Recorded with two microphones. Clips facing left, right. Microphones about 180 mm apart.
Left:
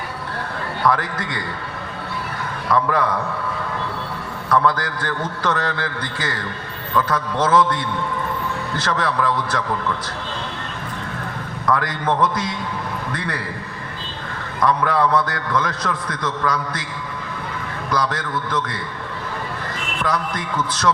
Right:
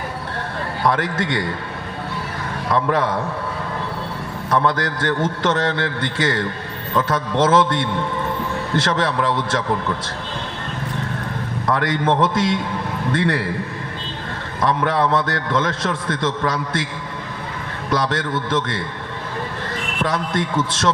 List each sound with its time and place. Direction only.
0.9 s a man's voice: 20° right (ahead or behind)
2.7 s a man's voice: 20° right (ahead or behind)
4.4 s a man's voice: 20° right (ahead or behind)
11.6 s a man's voice: 25° right (ahead or behind)
14.6 s a man's voice: 20° right (ahead or behind)
17.9 s a man's voice: 25° right (ahead or behind)
20.0 s a man's voice: 25° right (ahead or behind)